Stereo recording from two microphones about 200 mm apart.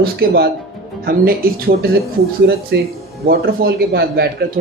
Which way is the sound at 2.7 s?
55° right (ahead or behind).